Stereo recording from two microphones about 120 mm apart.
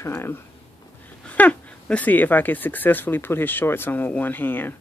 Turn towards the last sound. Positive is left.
turn(degrees=15)  # may be behind; listen again after turning